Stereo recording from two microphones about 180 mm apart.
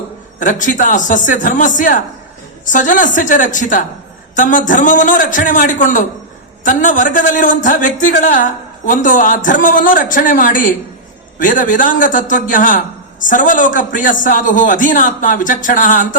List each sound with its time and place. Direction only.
0.3 s a man's voice: 45° left (ahead or behind)